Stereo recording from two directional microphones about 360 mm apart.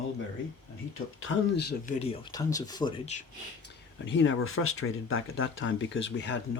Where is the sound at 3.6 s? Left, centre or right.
Left.